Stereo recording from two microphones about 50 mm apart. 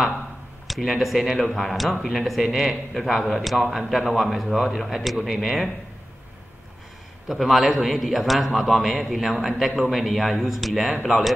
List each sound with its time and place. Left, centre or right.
0.7 s a man's voice: centre
7.2 s a man's voice: centre